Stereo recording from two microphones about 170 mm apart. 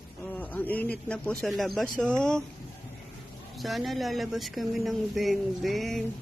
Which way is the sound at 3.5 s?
Centre (ahead or behind).